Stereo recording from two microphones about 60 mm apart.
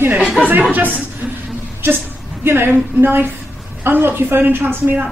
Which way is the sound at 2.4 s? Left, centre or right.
Right.